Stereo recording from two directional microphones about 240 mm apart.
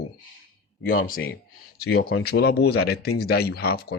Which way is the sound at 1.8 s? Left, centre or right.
Left.